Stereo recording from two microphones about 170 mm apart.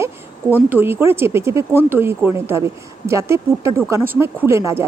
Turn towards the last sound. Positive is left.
turn(degrees=-15)  # may be behind; listen again after turning